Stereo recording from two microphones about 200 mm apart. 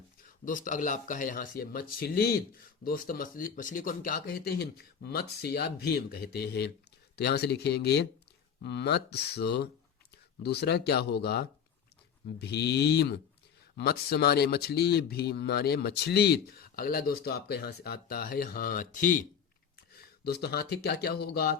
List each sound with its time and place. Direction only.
0.4 s speech: 40° left (ahead or behind)
20.0 s speech: 55° left (ahead or behind)